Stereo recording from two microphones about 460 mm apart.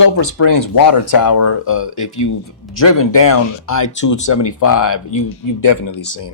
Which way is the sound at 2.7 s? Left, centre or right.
Left.